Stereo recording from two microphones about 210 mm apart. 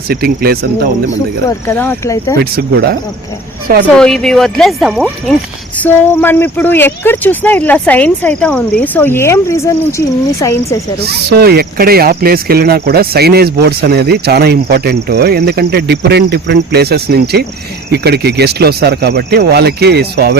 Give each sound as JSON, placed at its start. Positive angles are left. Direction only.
{"t": 0.1, "sound": "speech", "side_deg": -45}
{"t": 1.5, "sound": "speech", "side_deg": 10}
{"t": 2.4, "sound": "speech", "side_deg": -50}
{"t": 3.8, "sound": "speech", "side_deg": 5}
{"t": 11.0, "sound": "speech", "side_deg": -50}